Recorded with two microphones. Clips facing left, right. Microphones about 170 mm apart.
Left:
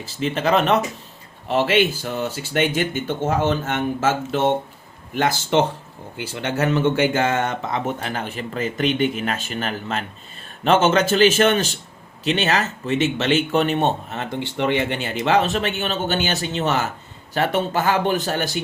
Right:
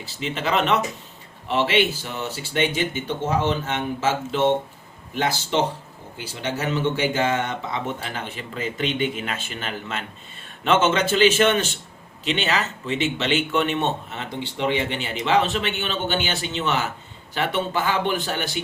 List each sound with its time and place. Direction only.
0.0 s a man's voice: 45° left (ahead or behind)
14.6 s speech: 55° left (ahead or behind)